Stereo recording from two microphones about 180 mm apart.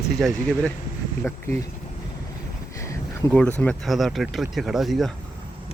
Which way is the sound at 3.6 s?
5° left (ahead or behind).